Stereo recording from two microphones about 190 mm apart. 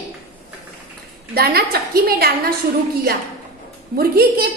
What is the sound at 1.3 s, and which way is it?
A woman's voice, 55° right (ahead or behind).